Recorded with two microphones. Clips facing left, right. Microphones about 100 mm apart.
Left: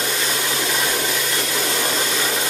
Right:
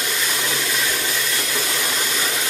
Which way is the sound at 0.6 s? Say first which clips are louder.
Left 2 dB; 40° left (ahead or behind).